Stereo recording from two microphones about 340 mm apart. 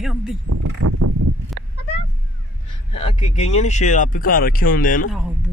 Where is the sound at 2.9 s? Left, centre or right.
Centre.